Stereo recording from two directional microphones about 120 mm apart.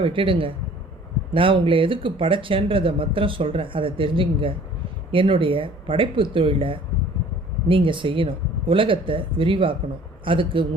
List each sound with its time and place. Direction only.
0.0 s speech: 45° right (ahead or behind)